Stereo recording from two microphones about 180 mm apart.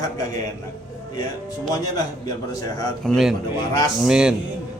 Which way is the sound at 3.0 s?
Centre (ahead or behind).